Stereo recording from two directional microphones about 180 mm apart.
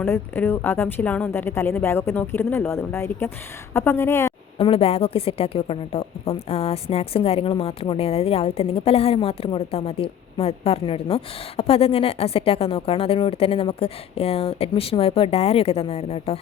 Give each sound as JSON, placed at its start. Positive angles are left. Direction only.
{"t": 0.0, "sound": "a woman's voice", "side_deg": 10}
{"t": 4.5, "sound": "a woman's voice", "side_deg": 35}